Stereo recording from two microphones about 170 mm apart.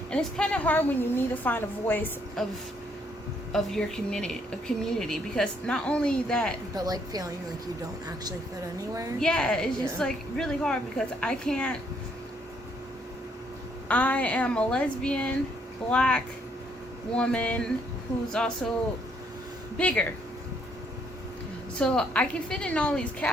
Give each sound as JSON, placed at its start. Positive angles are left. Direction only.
{"t": 0.1, "sound": "a woman's voice", "side_deg": 5}
{"t": 3.5, "sound": "a woman's voice", "side_deg": 5}
{"t": 6.7, "sound": "a woman's voice", "side_deg": -20}
{"t": 9.2, "sound": "a woman's voice", "side_deg": 5}
{"t": 13.8, "sound": "a woman's voice", "side_deg": 10}
{"t": 19.7, "sound": "a woman's voice", "side_deg": 5}
{"t": 21.8, "sound": "a woman's voice", "side_deg": 5}